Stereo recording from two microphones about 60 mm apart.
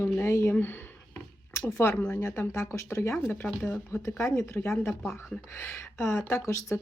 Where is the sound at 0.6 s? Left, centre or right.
Left.